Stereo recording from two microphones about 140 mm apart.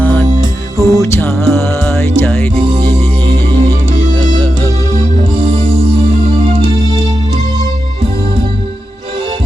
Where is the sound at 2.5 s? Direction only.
45° right (ahead or behind).